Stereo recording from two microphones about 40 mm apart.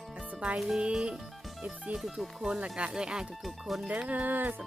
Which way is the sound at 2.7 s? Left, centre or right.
Right.